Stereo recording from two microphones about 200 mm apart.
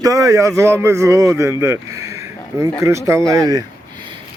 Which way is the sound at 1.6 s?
15° right (ahead or behind).